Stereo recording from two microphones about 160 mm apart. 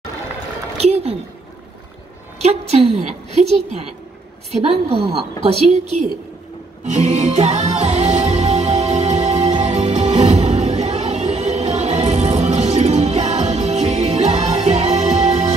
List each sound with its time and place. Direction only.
0.7 s a sound: 40° right (ahead or behind)
2.4 s a woman's voice: 40° right (ahead or behind)
4.5 s a woman's voice: 40° right (ahead or behind)
6.8 s music: 45° right (ahead or behind)